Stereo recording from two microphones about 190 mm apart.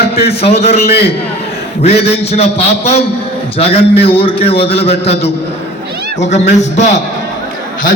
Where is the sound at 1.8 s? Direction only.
35° left (ahead or behind).